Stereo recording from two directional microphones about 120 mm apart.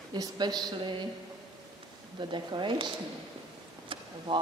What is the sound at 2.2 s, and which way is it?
Speech, 40° right (ahead or behind).